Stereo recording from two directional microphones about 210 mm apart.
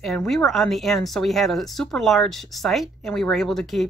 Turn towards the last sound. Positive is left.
turn(degrees=0)  # may be behind; listen again after turning